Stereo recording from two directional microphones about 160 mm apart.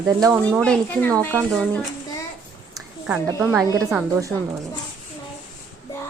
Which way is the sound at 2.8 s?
5° right (ahead or behind).